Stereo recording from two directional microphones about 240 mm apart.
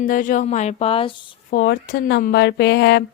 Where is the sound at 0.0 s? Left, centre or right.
Left.